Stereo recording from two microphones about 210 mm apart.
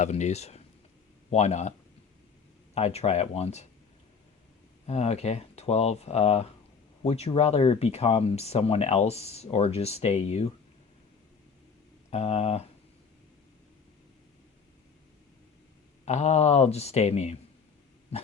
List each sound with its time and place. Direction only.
0.0 s speech: 35° left (ahead or behind)
2.7 s speech: 30° left (ahead or behind)
4.9 s speech: 30° left (ahead or behind)
12.1 s speech: 30° left (ahead or behind)
16.0 s speech: 30° left (ahead or behind)